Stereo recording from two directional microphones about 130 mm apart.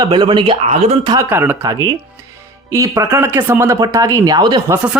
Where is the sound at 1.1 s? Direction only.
20° right (ahead or behind).